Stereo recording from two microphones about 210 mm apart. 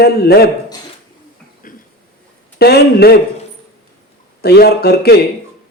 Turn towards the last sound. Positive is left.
turn(degrees=50)  # may be behind; listen again after turning